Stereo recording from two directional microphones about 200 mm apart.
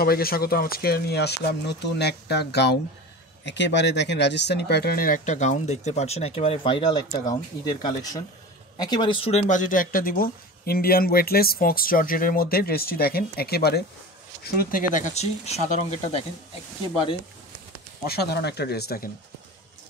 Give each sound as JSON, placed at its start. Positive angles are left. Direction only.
{"t": 0.0, "sound": "speech", "side_deg": 50}
{"t": 18.0, "sound": "speech", "side_deg": 50}